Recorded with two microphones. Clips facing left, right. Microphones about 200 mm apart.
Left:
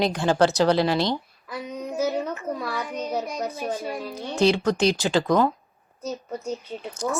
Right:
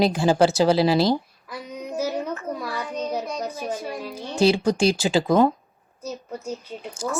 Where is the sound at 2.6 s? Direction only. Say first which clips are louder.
Right 1 dB; centre (ahead or behind).